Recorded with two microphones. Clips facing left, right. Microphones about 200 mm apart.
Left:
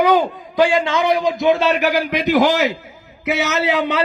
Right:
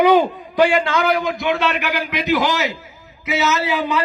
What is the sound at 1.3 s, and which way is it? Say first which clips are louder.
A man's voice: left 5 dB; 30° left (ahead or behind).